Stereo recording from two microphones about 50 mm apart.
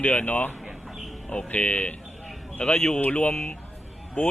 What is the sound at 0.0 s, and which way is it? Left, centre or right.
Speech, left.